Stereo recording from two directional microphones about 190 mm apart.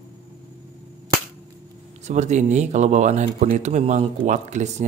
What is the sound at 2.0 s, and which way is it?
Speech, 35° right (ahead or behind).